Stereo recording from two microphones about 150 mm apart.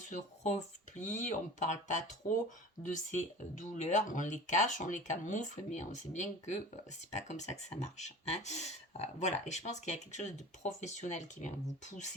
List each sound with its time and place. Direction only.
0.1 s speech: 50° left (ahead or behind)